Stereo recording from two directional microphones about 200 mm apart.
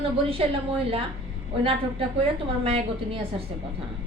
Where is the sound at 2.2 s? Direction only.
30° right (ahead or behind).